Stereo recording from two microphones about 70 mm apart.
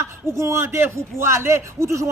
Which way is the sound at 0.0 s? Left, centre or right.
Right.